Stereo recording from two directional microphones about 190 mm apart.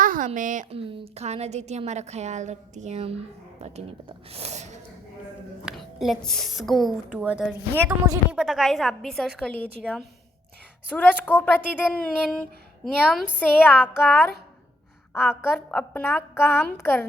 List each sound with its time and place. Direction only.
0.0 s a sound: 45° right (ahead or behind)
0.3 s speech: 45° right (ahead or behind)
0.8 s a woman's voice: 30° right (ahead or behind)
5.6 s a woman's voice: centre (ahead or behind)
7.9 s a woman's voice: 20° right (ahead or behind)
8.3 s a woman's voice: 5° right (ahead or behind)